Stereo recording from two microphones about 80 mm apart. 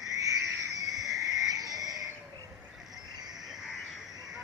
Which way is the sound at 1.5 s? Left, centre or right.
Right.